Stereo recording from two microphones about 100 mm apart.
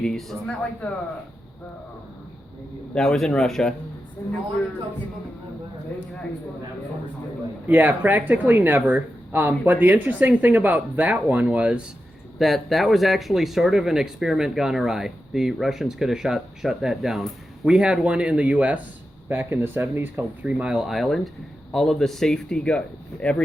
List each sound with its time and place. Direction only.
0.0 s speech: 5° left (ahead or behind)
2.9 s speech: 5° left (ahead or behind)
7.7 s speech: 20° right (ahead or behind)
12.4 s speech: centre (ahead or behind)